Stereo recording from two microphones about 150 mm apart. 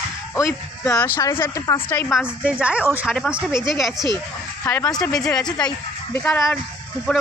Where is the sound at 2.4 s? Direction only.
10° right (ahead or behind).